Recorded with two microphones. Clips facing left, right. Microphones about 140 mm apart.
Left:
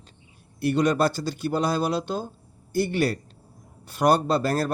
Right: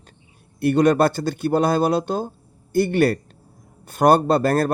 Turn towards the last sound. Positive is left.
turn(degrees=-50)  # may be behind; listen again after turning